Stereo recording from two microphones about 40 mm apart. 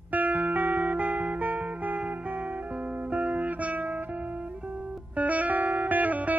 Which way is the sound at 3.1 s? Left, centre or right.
Right.